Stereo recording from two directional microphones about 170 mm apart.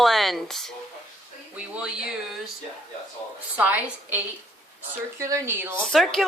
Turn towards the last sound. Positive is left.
turn(degrees=0)  # may be behind; listen again after turning